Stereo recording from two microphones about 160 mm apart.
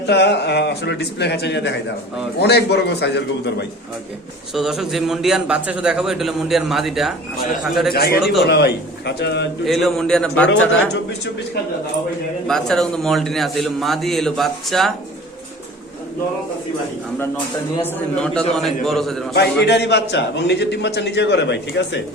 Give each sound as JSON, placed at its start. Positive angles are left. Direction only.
{"t": 0.0, "sound": "a man's voice", "side_deg": 90}
{"t": 4.5, "sound": "a man's voice", "side_deg": 0}
{"t": 7.9, "sound": "a man's voice", "side_deg": 90}
{"t": 8.2, "sound": "a man's voice", "side_deg": 0}
{"t": 8.4, "sound": "a man's voice", "side_deg": 90}
{"t": 9.6, "sound": "a man's voice", "side_deg": 0}
{"t": 12.5, "sound": "a man's voice", "side_deg": 5}
{"t": 17.8, "sound": "a man's voice", "side_deg": 5}
{"t": 19.3, "sound": "a man's voice", "side_deg": 90}